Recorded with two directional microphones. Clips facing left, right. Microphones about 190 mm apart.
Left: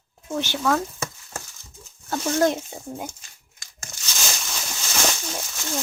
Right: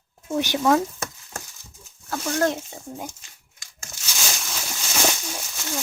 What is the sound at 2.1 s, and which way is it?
Speech, 15° left (ahead or behind).